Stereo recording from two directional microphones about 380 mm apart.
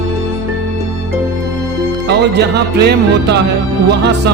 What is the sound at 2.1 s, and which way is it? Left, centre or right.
Music, right.